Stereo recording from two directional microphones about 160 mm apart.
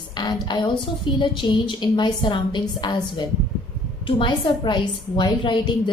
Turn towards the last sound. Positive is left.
turn(degrees=30)  # may be behind; listen again after turning